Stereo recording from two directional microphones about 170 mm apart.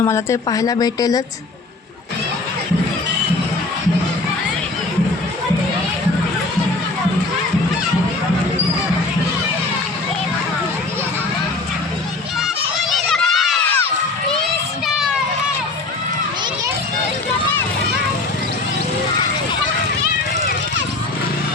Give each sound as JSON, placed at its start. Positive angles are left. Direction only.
{"t": 0.0, "sound": "a woman's voice", "side_deg": 15}
{"t": 12.9, "sound": "run", "side_deg": 0}
{"t": 14.9, "sound": "a sound", "side_deg": -5}